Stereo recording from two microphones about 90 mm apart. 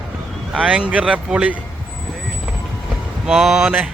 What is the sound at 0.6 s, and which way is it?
Speech, 15° right (ahead or behind).